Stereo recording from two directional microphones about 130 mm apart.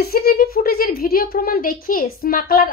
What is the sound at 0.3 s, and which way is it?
A woman's voice, 90° left.